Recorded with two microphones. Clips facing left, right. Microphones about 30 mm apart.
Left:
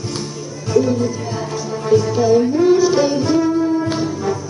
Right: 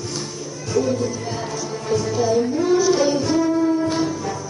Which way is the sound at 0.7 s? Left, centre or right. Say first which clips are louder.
Left 5 dB; centre.